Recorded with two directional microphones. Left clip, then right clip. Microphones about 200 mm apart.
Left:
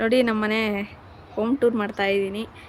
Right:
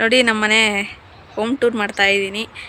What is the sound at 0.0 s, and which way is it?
Speech, centre (ahead or behind).